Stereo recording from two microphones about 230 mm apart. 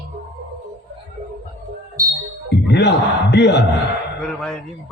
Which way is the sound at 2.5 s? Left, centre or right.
Left.